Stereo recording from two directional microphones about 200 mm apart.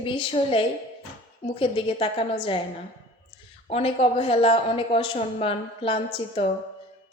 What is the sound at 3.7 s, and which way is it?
A woman's voice, 30° left (ahead or behind).